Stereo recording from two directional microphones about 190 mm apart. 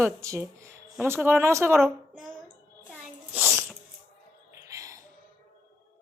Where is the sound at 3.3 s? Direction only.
10° right (ahead or behind).